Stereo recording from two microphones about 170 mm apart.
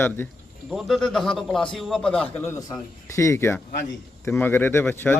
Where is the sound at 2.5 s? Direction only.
20° left (ahead or behind).